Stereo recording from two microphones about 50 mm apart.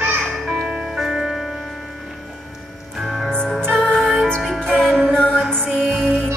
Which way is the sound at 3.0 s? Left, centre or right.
Centre.